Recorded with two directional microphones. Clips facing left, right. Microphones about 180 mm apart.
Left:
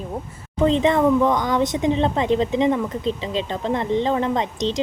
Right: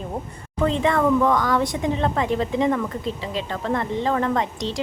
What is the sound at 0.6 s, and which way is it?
Speech, 20° left (ahead or behind).